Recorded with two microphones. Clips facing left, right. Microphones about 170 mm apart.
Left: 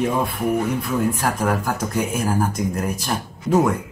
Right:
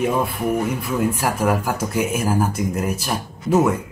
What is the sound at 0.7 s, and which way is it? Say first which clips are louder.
Speech: even; 10° right (ahead or behind).